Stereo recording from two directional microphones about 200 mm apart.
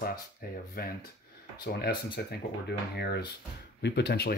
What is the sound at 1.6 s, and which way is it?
Speech, 50° left (ahead or behind).